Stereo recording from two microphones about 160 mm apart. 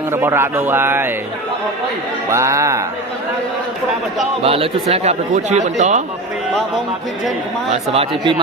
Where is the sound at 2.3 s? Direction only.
20° right (ahead or behind).